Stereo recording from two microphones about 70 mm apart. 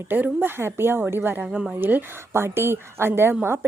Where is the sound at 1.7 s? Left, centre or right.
Right.